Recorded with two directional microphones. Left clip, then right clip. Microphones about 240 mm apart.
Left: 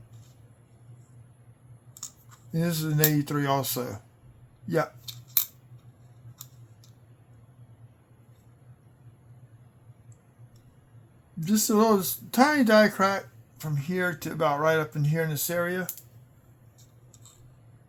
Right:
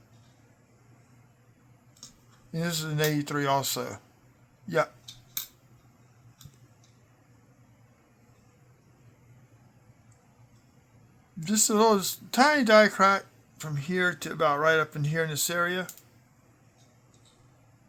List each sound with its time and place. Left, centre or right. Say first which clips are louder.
2.5 s speech: left 2 dB; right
11.3 s speech: even; right